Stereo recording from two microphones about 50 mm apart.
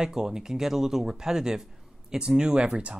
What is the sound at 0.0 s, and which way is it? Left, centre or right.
Speech, centre.